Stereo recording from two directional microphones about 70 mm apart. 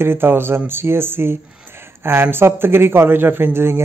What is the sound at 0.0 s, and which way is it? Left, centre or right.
A man's voice, right.